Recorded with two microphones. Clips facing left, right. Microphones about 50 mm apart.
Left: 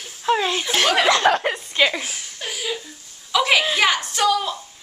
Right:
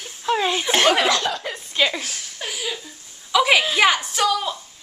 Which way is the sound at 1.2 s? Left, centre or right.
Left.